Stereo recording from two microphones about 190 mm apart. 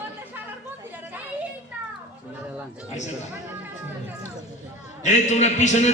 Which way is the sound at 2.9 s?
40° left (ahead or behind).